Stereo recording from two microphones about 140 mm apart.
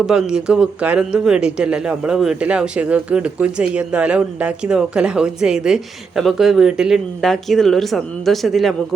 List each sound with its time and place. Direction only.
0.0 s speech: 5° right (ahead or behind)